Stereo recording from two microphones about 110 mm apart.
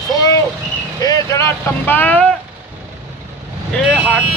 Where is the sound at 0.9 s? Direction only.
35° left (ahead or behind); by 2.3 s 15° left (ahead or behind).